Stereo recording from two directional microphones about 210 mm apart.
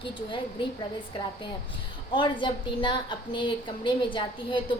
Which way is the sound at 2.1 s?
25° left (ahead or behind).